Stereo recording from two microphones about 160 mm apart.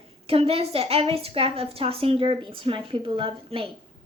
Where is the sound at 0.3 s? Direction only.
40° right (ahead or behind).